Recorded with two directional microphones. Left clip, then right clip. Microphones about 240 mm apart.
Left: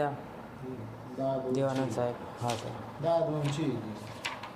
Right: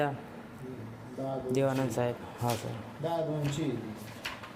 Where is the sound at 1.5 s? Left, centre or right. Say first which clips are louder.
Right 1 dB; right.